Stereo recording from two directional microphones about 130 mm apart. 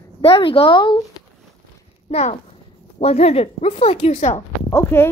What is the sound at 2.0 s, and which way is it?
Speech, 55° left (ahead or behind).